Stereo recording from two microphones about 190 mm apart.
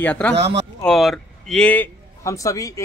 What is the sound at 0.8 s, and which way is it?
A man's voice, centre (ahead or behind).